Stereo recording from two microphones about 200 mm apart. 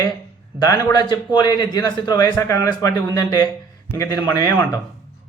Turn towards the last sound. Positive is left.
turn(degrees=15)  # may be behind; listen again after turning